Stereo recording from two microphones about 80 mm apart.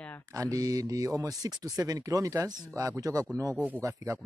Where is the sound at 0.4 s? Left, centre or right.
Right.